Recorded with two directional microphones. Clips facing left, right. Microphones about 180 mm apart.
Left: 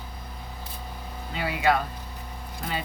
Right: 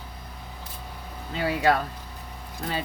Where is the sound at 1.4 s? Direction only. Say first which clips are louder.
Right 1 dB; 40° right (ahead or behind).